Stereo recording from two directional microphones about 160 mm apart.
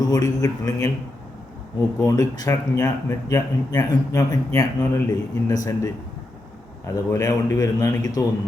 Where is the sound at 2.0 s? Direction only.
20° left (ahead or behind).